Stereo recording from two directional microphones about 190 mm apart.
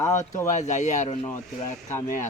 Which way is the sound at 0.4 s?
40° left (ahead or behind).